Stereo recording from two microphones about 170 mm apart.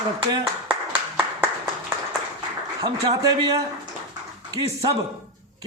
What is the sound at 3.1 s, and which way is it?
Speech, 20° right (ahead or behind).